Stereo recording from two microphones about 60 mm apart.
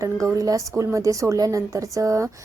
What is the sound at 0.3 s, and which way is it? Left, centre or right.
Speech, right.